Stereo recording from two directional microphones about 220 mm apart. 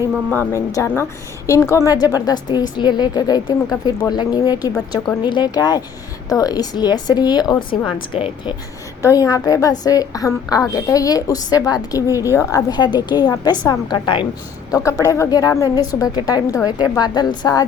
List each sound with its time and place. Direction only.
0.3 s a woman's voice: 15° left (ahead or behind)